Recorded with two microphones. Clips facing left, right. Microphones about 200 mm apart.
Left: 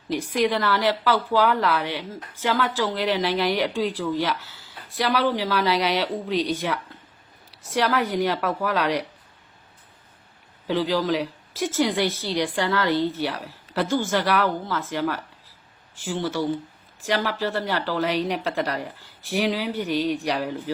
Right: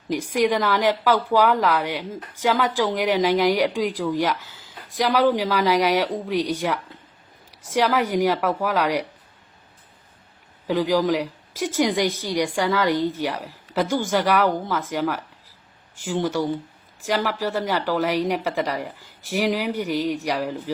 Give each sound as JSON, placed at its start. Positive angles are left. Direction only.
{"t": 0.1, "sound": "a woman's voice", "side_deg": -15}
{"t": 10.7, "sound": "a woman's voice", "side_deg": -15}